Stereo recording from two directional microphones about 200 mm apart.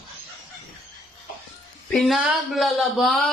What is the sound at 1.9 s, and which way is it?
Speech, centre (ahead or behind).